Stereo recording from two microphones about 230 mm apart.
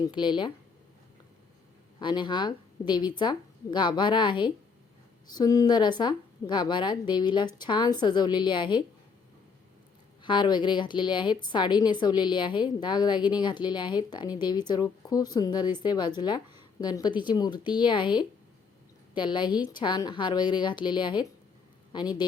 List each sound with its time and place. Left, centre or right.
0.1 s a woman's voice: centre
2.0 s a woman's voice: centre
10.2 s a woman's voice: centre